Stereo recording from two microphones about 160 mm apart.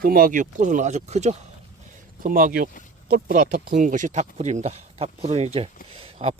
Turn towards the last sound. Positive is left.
turn(degrees=-40)  # may be behind; listen again after turning